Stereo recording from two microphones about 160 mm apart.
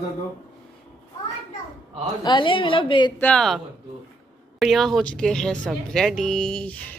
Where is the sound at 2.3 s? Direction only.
30° left (ahead or behind).